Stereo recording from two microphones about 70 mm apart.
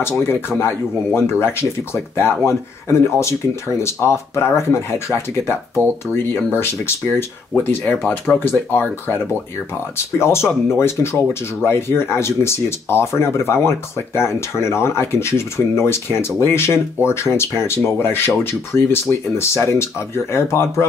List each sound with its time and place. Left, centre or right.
0.0 s speech: left
7.6 s speech: left